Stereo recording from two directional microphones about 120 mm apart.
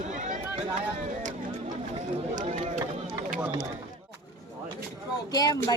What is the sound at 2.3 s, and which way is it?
Speech, 75° right (ahead or behind).